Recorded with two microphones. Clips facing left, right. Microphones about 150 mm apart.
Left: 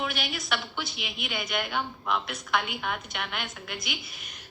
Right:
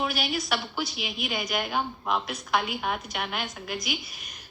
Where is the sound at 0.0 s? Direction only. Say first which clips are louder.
Right 4 dB; 35° right (ahead or behind).